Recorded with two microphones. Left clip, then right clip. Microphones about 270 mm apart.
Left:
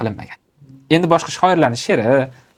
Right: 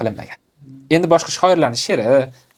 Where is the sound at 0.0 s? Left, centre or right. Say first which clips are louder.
Right 2 dB; left.